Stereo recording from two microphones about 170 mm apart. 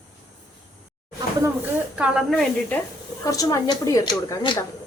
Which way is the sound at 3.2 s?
20° left (ahead or behind).